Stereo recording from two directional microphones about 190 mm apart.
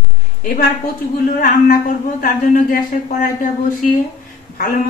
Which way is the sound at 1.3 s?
50° left (ahead or behind).